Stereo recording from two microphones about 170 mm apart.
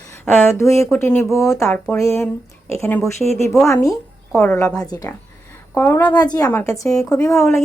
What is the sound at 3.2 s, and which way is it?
Speech, 40° right (ahead or behind).